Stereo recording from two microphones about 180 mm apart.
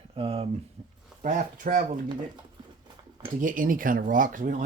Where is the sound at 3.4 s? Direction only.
50° right (ahead or behind).